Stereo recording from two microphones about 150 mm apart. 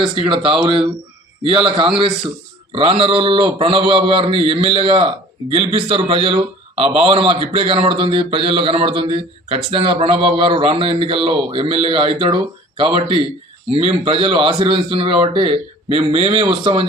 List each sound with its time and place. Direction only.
0.1 s a man's voice: 35° right (ahead or behind)